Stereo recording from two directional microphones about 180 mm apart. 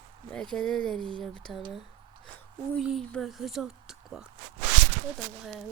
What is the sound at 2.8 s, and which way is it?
Speech, centre (ahead or behind).